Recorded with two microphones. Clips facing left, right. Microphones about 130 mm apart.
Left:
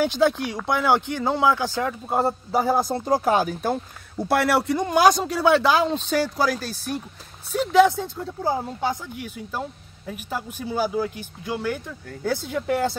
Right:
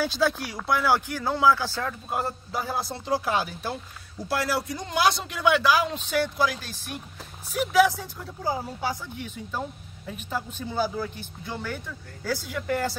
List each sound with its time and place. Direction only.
0.0 s speech: 20° left (ahead or behind)
2.0 s speech: 30° left (ahead or behind)
2.5 s speech: 45° left (ahead or behind)
7.5 s speech: 25° left (ahead or behind)
8.8 s speech: 10° left (ahead or behind)